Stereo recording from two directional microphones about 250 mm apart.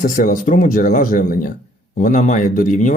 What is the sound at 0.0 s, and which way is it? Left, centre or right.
Speech, left.